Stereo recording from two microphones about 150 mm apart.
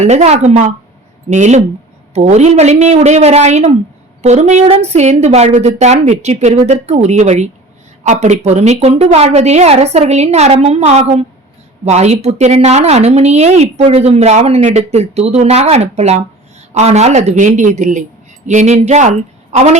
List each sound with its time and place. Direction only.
0.0 s speech: 45° right (ahead or behind)